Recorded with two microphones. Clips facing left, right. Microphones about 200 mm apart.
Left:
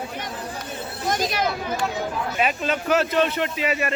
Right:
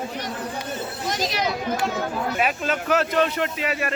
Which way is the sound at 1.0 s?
50° left (ahead or behind).